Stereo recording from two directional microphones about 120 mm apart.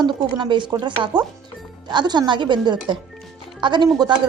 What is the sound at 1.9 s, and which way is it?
A woman's voice, 40° right (ahead or behind).